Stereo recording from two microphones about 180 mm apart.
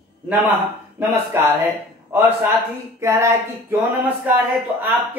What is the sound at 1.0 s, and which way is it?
Speech, 10° right (ahead or behind).